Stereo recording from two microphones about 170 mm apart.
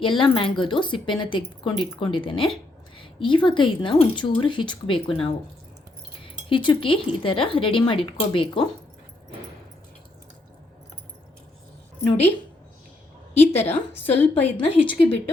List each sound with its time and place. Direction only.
0.0 s speech: 30° left (ahead or behind)
13.3 s a sound: 40° left (ahead or behind)
13.9 s a woman's voice: 10° left (ahead or behind)
14.4 s speech: 35° left (ahead or behind)